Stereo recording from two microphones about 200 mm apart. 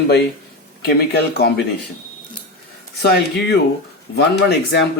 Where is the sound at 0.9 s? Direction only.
55° left (ahead or behind).